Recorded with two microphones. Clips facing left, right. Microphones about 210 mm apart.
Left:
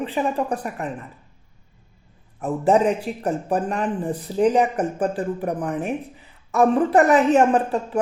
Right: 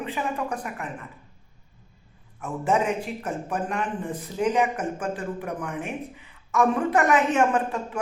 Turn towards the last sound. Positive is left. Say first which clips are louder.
# left 5 dB
turn(degrees=35)  # may be behind; listen again after turning